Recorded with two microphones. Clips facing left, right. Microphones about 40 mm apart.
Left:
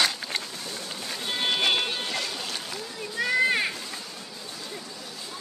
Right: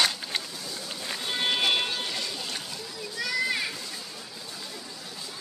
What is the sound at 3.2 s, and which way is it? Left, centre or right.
Children playing, left.